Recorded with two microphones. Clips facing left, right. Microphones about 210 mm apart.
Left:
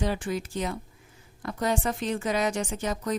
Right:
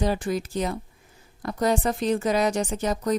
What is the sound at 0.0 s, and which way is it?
A woman's voice, 40° right (ahead or behind).